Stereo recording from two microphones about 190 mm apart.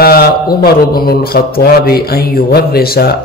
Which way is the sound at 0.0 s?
55° left (ahead or behind).